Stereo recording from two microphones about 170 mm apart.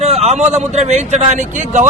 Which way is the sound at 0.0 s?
40° right (ahead or behind).